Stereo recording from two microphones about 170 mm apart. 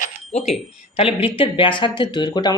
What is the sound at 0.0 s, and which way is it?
Bicycle bell, 40° left (ahead or behind).